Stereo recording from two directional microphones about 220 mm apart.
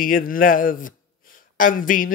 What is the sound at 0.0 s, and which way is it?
Speech, 40° left (ahead or behind).